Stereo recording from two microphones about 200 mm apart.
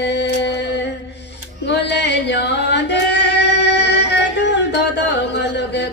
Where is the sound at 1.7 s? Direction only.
60° left (ahead or behind).